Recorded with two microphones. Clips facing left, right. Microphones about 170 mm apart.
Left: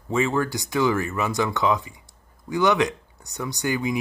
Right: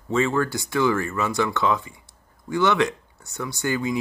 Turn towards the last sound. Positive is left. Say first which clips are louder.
# even
turn(degrees=15)  # may be behind; listen again after turning